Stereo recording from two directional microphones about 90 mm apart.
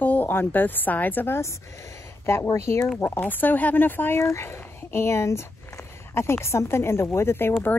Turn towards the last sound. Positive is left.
turn(degrees=25)  # may be behind; listen again after turning